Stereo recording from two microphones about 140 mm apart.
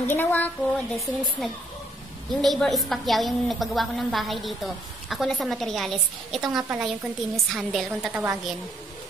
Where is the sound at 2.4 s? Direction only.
Centre (ahead or behind).